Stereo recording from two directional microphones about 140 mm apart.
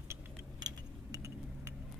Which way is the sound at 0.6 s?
25° right (ahead or behind).